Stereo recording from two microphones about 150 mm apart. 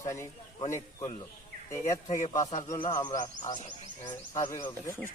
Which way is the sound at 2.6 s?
35° left (ahead or behind).